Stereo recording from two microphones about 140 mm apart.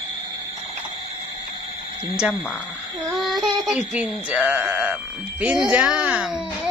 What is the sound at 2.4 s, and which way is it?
Speech, 5° left (ahead or behind).